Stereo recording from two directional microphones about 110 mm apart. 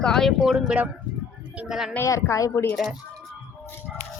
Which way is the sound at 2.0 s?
30° left (ahead or behind).